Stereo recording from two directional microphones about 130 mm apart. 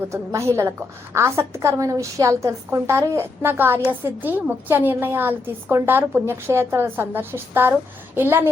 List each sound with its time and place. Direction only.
0.1 s a woman's voice: 20° right (ahead or behind)